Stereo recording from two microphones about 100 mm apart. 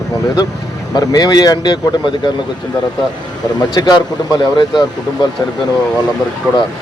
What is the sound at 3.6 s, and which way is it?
Speech, 45° left (ahead or behind).